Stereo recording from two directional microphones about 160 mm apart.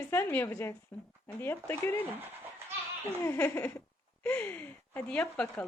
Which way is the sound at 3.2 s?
15° left (ahead or behind).